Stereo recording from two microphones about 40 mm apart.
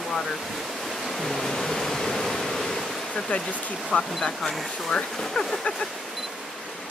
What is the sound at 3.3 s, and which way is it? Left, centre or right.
Speech, left.